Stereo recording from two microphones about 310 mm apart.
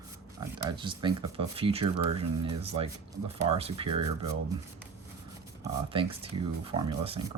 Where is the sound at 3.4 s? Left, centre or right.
Centre.